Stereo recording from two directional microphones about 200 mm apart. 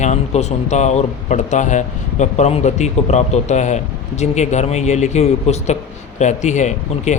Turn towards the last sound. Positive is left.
turn(degrees=35)  # may be behind; listen again after turning